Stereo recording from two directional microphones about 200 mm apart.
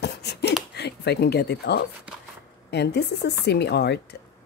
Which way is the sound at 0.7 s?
55° left (ahead or behind).